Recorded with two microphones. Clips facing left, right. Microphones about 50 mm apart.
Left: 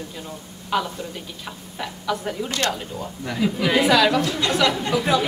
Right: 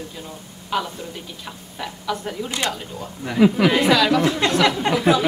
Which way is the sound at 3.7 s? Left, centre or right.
Centre.